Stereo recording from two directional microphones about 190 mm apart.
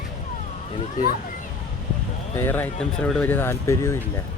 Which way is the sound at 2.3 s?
10° left (ahead or behind).